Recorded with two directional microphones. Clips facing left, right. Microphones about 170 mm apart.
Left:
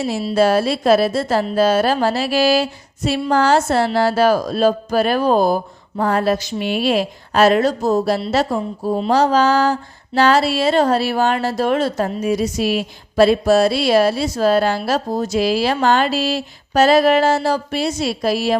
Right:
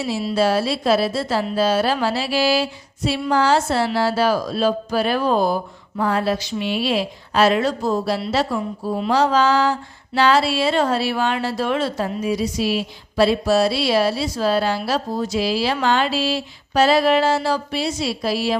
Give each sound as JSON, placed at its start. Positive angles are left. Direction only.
{"t": 0.3, "sound": "speech", "side_deg": 50}